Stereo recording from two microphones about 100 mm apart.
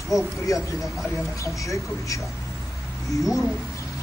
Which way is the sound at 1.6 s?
30° left (ahead or behind).